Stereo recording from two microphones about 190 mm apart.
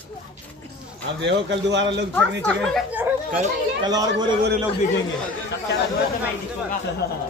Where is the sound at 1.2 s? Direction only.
70° right (ahead or behind).